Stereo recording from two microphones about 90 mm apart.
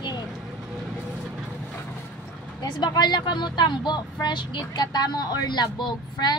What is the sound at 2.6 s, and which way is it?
Speech, 50° left (ahead or behind).